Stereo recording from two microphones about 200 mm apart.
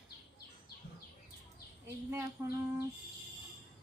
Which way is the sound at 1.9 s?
15° right (ahead or behind).